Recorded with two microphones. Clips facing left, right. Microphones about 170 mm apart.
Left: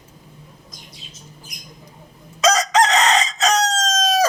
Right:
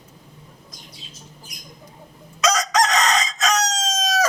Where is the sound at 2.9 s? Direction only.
30° left (ahead or behind).